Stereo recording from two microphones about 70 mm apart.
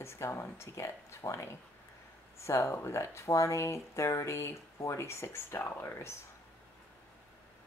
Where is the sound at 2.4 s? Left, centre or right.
Left.